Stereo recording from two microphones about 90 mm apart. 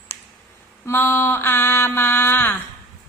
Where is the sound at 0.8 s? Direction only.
30° left (ahead or behind).